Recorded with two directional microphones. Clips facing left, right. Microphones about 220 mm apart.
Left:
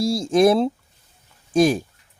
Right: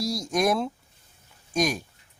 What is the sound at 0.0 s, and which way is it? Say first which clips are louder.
Speech: left 8 dB; 30° left (ahead or behind).